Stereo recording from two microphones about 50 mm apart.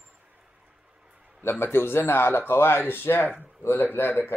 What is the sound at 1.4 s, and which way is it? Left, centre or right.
Speech, left.